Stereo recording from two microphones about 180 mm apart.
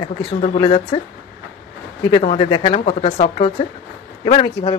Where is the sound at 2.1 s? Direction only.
35° left (ahead or behind).